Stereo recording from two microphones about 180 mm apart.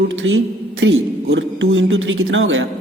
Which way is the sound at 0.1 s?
90° right.